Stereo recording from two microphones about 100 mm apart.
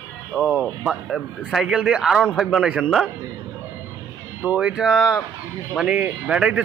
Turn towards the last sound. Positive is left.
turn(degrees=-10)  # may be behind; listen again after turning